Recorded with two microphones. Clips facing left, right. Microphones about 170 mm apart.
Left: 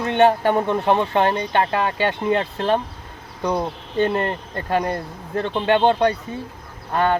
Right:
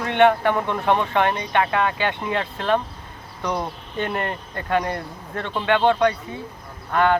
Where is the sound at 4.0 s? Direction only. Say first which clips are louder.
Left 5 dB; 25° left (ahead or behind).